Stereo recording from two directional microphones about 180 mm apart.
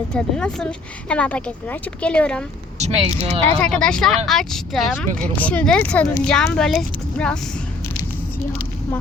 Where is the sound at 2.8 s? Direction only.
35° right (ahead or behind).